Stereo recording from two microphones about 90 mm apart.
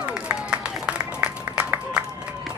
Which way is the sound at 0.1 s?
10° right (ahead or behind).